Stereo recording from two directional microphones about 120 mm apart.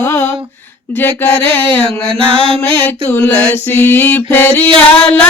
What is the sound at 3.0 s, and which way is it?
Mantra, 15° left (ahead or behind).